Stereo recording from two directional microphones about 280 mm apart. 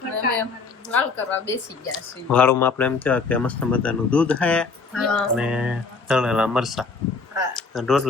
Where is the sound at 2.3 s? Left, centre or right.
Centre.